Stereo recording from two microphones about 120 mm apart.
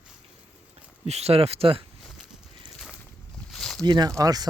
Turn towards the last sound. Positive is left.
turn(degrees=-30)  # may be behind; listen again after turning